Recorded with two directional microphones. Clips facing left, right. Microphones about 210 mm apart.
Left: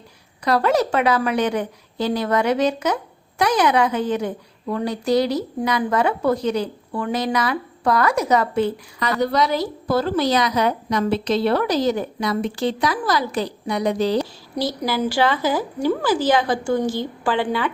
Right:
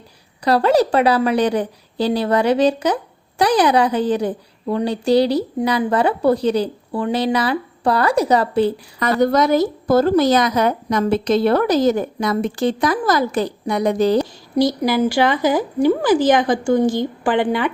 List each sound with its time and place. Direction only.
0.4 s a woman's voice: 30° right (ahead or behind)
9.2 s a woman's voice: 50° right (ahead or behind)
14.6 s a woman's voice: 15° right (ahead or behind)